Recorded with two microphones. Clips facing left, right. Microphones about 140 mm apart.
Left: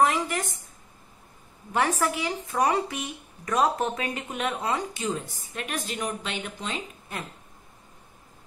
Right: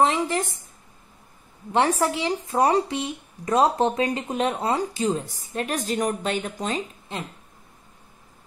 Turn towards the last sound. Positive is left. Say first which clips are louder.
# right 3 dB
turn(degrees=-25)  # may be behind; listen again after turning